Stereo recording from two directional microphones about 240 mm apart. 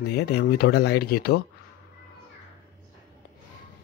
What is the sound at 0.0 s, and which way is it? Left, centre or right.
Speech, left.